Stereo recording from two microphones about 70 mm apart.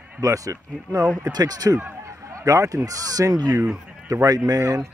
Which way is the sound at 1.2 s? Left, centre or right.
Right.